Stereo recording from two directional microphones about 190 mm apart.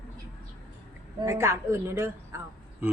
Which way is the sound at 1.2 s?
15° right (ahead or behind).